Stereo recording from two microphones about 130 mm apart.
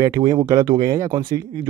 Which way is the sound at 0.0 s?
25° right (ahead or behind).